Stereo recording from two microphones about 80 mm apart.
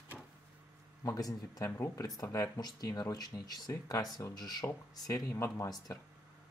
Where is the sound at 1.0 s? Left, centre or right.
Left.